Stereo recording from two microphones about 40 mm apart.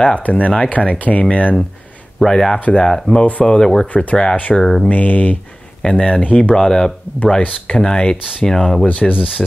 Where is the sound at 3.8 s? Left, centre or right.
Left.